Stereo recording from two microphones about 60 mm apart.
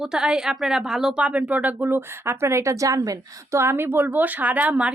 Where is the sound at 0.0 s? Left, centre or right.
Centre.